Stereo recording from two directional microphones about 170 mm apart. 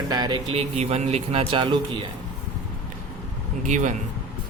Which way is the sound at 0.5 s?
40° right (ahead or behind).